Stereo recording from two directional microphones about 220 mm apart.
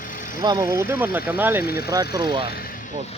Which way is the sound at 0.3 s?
15° right (ahead or behind).